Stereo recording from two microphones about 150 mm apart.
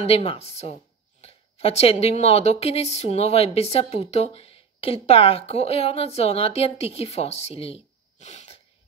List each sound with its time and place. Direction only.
0.0 s speech: 40° left (ahead or behind)